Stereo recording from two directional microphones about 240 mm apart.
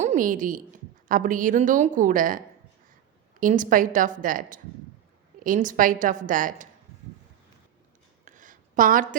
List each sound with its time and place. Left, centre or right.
0.0 s a woman's voice: right
3.4 s a woman's voice: right
8.2 s a sound: right